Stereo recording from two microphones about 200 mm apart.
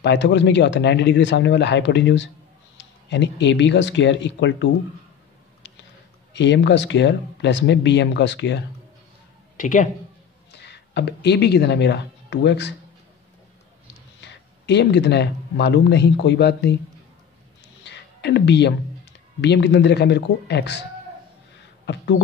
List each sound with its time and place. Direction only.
0.0 s speech: 60° left (ahead or behind)
6.3 s speech: 60° left (ahead or behind)
9.6 s speech: 40° left (ahead or behind)
10.5 s speech: 55° left (ahead or behind)
14.2 s speech: 60° left (ahead or behind)
17.8 s music: 60° left (ahead or behind)
19.4 s speech: 60° left (ahead or behind)